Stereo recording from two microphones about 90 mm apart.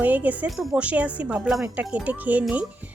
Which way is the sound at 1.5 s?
Centre (ahead or behind).